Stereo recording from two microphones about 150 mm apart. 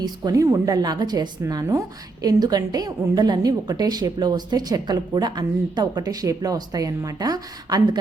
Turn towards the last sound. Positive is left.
turn(degrees=-25)  # may be behind; listen again after turning